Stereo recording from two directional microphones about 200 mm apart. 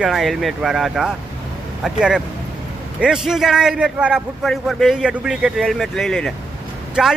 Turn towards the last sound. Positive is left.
turn(degrees=-5)  # may be behind; listen again after turning